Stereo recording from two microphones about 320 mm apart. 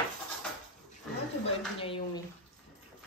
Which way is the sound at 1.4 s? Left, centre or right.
Centre.